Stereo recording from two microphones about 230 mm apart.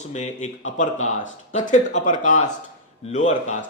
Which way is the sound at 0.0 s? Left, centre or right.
Left.